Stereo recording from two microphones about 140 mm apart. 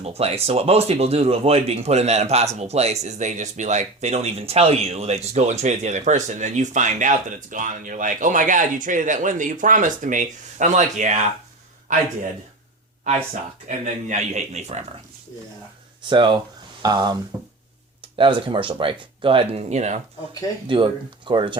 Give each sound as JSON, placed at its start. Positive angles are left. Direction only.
{"t": 0.0, "sound": "speech", "side_deg": -45}
{"t": 13.7, "sound": "speech", "side_deg": -60}
{"t": 16.0, "sound": "speech", "side_deg": -35}
{"t": 18.2, "sound": "speech", "side_deg": -35}
{"t": 19.7, "sound": "speech", "side_deg": -55}
{"t": 20.7, "sound": "speech", "side_deg": -35}